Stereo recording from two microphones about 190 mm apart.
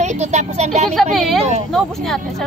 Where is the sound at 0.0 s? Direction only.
35° right (ahead or behind).